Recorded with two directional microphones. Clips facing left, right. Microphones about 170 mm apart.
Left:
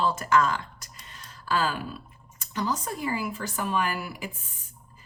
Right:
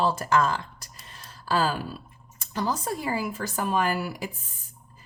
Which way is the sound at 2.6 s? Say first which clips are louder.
Right 1 dB; 40° right (ahead or behind).